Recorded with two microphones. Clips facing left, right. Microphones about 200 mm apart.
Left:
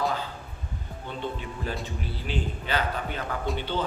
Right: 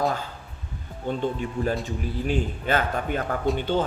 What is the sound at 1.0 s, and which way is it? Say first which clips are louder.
Speech: right 8 dB; 45° right (ahead or behind).